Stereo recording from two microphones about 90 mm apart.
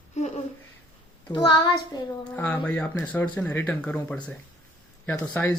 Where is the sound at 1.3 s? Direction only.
60° left (ahead or behind).